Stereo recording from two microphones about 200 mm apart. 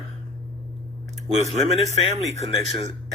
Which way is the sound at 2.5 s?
Centre (ahead or behind).